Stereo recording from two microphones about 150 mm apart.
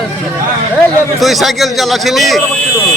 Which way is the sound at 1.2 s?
Centre (ahead or behind).